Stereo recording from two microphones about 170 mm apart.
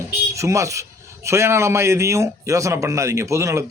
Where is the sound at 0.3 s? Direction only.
15° right (ahead or behind).